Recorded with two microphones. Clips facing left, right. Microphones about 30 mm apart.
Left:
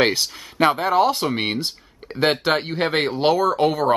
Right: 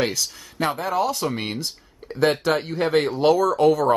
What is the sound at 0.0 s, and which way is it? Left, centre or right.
Speech, left.